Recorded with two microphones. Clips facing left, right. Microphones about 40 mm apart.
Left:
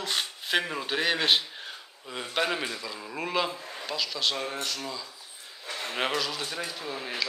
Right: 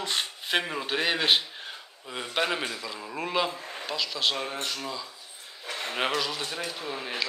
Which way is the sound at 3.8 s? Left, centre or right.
Centre.